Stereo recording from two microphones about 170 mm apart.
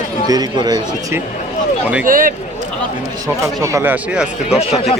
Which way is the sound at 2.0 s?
55° right (ahead or behind).